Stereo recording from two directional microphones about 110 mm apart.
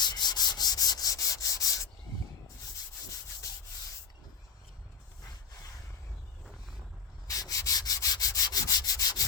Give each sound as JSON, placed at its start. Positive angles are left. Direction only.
{"t": 0.0, "sound": "rub", "side_deg": 40}
{"t": 6.4, "sound": "vehicle", "side_deg": 0}
{"t": 7.3, "sound": "rub", "side_deg": 30}